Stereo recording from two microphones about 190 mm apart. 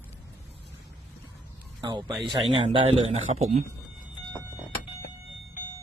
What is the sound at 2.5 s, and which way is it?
A man's voice, 30° right (ahead or behind).